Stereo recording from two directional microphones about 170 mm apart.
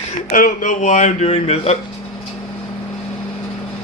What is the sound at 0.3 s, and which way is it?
Speech, 55° left (ahead or behind).